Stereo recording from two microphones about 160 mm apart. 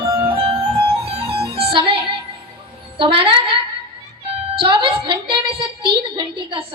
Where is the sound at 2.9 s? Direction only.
35° right (ahead or behind).